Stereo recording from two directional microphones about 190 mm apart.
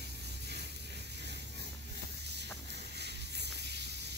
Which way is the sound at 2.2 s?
60° right (ahead or behind).